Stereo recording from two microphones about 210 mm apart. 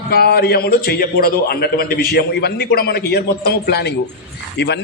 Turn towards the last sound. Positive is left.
turn(degrees=55)  # may be behind; listen again after turning